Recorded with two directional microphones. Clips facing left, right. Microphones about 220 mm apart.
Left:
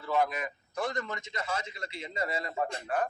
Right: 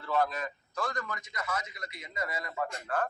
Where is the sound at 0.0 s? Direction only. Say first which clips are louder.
Left 1 dB; 10° left (ahead or behind); by 2.8 s 30° left (ahead or behind).